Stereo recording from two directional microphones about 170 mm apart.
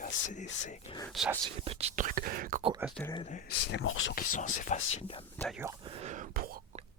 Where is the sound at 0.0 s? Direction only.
45° left (ahead or behind).